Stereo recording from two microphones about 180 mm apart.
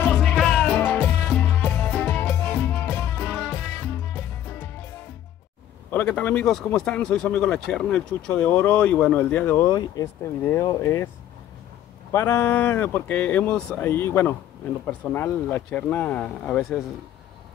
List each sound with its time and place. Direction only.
0.1 s music: centre (ahead or behind)
0.7 s music: 10° left (ahead or behind)
5.9 s speech: 10° left (ahead or behind)
10.0 s speech: 20° left (ahead or behind)
12.1 s speech: 15° left (ahead or behind)